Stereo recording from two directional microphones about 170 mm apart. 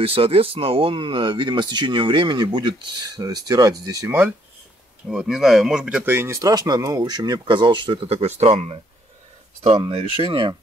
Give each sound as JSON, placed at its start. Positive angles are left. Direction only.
{"t": 0.0, "sound": "speech", "side_deg": -35}
{"t": 5.0, "sound": "speech", "side_deg": -5}